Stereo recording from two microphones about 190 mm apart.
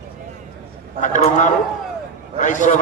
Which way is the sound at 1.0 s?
40° left (ahead or behind).